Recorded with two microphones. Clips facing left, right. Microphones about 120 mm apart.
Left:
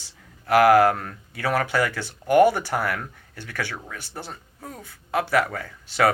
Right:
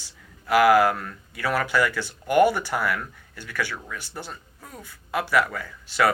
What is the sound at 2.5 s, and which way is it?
Speech, 50° left (ahead or behind).